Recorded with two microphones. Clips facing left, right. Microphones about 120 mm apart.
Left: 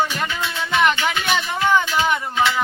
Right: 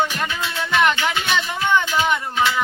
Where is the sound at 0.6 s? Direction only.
Centre (ahead or behind).